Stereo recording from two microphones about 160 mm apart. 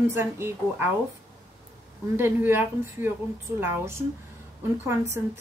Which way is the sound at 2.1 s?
15° right (ahead or behind).